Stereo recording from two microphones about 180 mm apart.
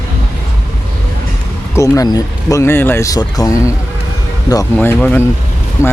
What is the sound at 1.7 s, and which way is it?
Speech, 15° left (ahead or behind).